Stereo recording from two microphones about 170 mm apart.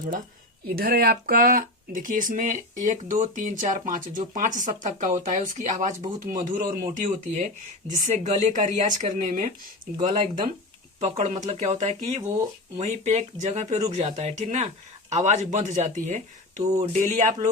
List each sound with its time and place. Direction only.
0.7 s speech: 60° right (ahead or behind); by 9.5 s 45° right (ahead or behind)
10.1 s speech: 30° right (ahead or behind)